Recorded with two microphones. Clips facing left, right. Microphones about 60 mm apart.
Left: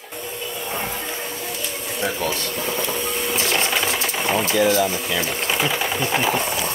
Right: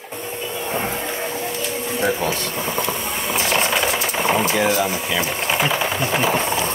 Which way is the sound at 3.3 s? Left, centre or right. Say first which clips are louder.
Right 3 dB; right.